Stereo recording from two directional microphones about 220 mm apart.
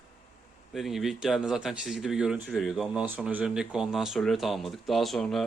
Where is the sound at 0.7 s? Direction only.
Centre (ahead or behind).